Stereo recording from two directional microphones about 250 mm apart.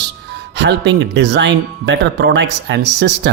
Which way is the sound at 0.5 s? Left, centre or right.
Right.